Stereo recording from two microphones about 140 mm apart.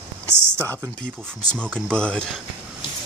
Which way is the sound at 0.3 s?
15° right (ahead or behind).